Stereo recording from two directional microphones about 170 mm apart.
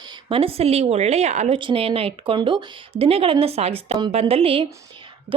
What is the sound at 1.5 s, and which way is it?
A woman's voice, 30° right (ahead or behind).